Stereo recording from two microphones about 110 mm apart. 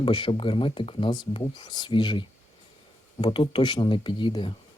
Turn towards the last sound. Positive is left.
turn(degrees=50)  # may be behind; listen again after turning